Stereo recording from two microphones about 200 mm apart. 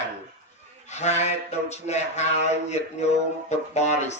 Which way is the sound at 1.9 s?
35° left (ahead or behind).